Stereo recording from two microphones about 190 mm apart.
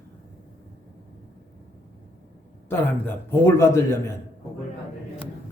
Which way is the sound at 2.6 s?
10° left (ahead or behind).